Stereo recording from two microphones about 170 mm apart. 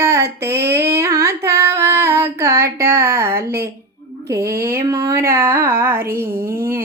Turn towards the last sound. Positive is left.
turn(degrees=-15)  # may be behind; listen again after turning